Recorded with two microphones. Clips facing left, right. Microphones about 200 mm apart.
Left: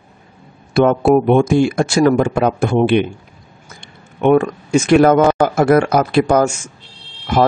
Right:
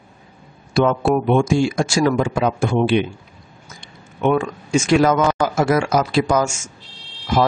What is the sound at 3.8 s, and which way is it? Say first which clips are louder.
Speech: left 4 dB; 60° left (ahead or behind).